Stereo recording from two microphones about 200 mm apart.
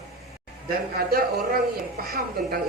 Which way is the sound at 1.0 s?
50° right (ahead or behind).